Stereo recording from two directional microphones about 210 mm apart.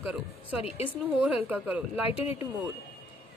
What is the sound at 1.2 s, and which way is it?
Speech, 5° right (ahead or behind).